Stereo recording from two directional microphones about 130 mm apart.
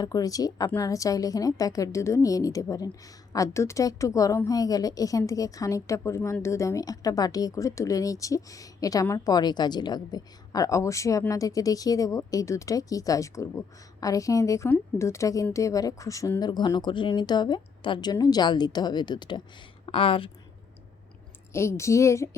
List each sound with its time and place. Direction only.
0.0 s a woman's voice: 30° left (ahead or behind)
21.5 s a woman's voice: 20° left (ahead or behind)